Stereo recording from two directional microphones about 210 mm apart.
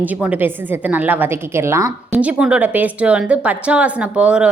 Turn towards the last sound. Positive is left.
turn(degrees=-5)  # may be behind; listen again after turning